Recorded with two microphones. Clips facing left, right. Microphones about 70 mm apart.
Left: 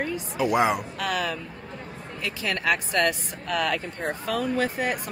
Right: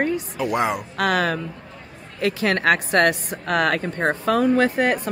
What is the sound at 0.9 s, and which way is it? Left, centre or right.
Speech, right.